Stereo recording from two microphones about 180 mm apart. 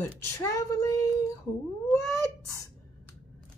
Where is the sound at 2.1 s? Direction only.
15° left (ahead or behind).